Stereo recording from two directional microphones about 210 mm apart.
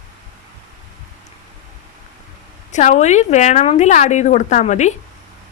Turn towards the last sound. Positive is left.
turn(degrees=35)  # may be behind; listen again after turning